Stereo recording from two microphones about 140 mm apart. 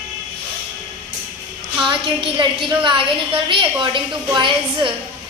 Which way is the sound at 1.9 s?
35° right (ahead or behind).